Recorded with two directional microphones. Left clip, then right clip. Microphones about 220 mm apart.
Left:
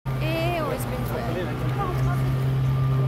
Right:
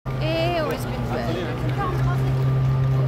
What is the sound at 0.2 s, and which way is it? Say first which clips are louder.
Vehicle: right 3 dB; 5° right (ahead or behind).